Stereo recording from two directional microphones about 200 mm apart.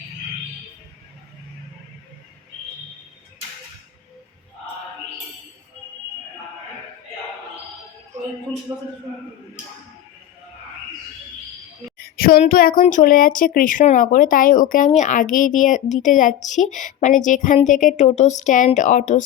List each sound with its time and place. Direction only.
8.7 s a man's voice: 15° right (ahead or behind)
12.1 s speech: 45° left (ahead or behind)